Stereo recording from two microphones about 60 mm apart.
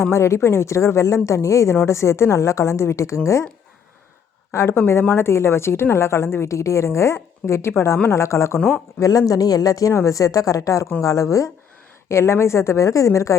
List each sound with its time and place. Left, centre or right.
0.0 s a woman's voice: left
4.5 s a woman's voice: left
9.0 s speech: left
9.9 s a woman's voice: left